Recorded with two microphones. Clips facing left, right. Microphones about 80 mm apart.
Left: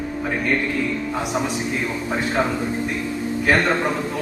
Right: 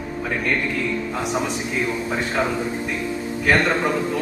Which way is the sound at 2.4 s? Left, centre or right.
Centre.